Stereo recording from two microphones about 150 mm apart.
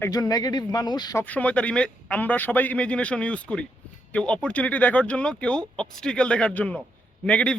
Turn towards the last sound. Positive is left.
turn(degrees=10)  # may be behind; listen again after turning